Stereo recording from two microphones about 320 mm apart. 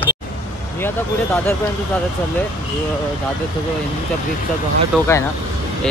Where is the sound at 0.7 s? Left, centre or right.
Centre.